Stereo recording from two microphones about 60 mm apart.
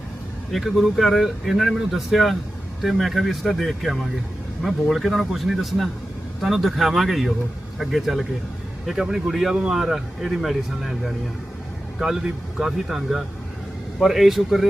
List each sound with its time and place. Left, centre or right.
0.5 s speech: centre